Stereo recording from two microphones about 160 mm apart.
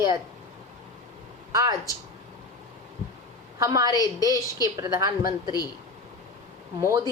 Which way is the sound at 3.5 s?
20° right (ahead or behind).